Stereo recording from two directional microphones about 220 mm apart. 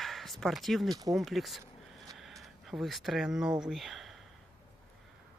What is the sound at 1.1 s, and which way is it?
Speech, centre (ahead or behind).